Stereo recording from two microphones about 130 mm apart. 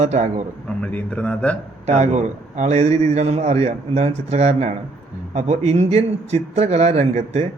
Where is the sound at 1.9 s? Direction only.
60° right (ahead or behind).